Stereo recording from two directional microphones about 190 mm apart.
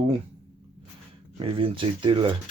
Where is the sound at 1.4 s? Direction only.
30° right (ahead or behind).